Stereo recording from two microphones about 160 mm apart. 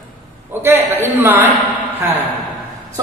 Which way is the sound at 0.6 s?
15° right (ahead or behind).